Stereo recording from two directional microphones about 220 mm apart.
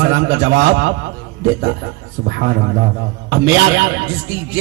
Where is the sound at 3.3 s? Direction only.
50° right (ahead or behind).